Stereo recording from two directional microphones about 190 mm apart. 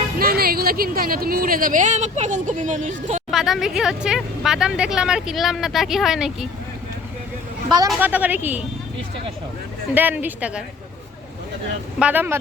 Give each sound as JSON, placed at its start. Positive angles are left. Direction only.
{"t": 0.2, "sound": "speech", "side_deg": -55}
{"t": 3.3, "sound": "speech", "side_deg": 0}
{"t": 8.0, "sound": "speech", "side_deg": -10}
{"t": 9.9, "sound": "speech", "side_deg": -10}
{"t": 11.9, "sound": "speech", "side_deg": -10}